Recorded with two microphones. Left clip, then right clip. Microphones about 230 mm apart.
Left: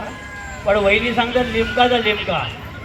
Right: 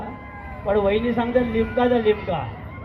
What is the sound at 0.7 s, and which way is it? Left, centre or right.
Speech, right.